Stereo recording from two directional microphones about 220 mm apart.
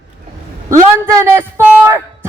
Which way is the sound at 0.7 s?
15° right (ahead or behind).